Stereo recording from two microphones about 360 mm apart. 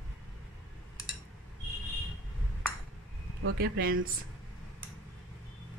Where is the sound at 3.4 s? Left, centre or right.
Right.